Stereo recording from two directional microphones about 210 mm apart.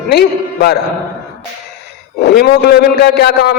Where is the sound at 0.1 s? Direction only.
50° left (ahead or behind).